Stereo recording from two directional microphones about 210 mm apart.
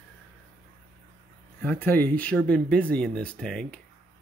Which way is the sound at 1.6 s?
10° left (ahead or behind).